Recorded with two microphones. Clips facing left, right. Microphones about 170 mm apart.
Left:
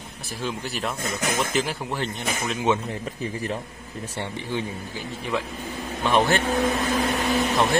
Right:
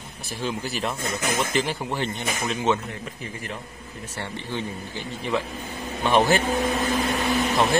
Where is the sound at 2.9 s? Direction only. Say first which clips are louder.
Left 5 dB; 30° left (ahead or behind).